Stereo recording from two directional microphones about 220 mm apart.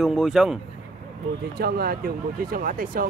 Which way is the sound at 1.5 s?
45° right (ahead or behind).